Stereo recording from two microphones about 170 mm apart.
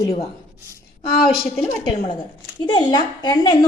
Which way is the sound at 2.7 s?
25° left (ahead or behind).